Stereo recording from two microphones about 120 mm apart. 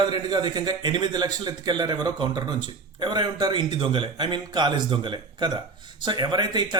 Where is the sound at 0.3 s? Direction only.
35° right (ahead or behind).